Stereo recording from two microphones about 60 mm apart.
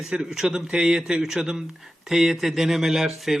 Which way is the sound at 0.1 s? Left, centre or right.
Centre.